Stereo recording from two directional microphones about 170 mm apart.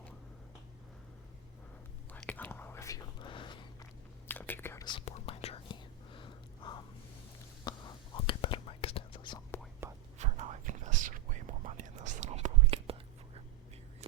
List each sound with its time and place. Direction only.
2.1 s whispering: 10° left (ahead or behind); by 3.8 s 30° left (ahead or behind)
4.3 s whispering: 10° left (ahead or behind)
4.9 s whispering: 35° left (ahead or behind)
9.8 s whispering: 15° right (ahead or behind)
10.2 s whispering: 40° right (ahead or behind)